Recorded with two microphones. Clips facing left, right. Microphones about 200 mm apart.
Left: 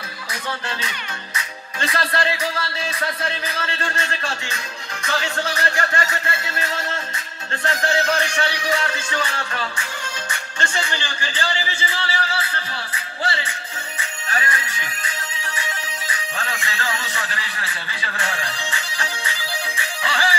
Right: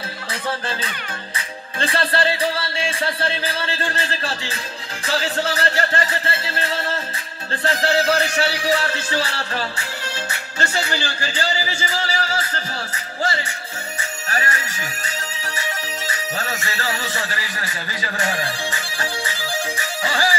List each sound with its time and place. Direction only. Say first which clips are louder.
0.5 s speech: right 3 dB; 30° right (ahead or behind)
10.9 s music: right 3 dB; 40° right (ahead or behind)
16.3 s speech: even; 40° right (ahead or behind)
19.8 s music: right 1 dB; 40° right (ahead or behind)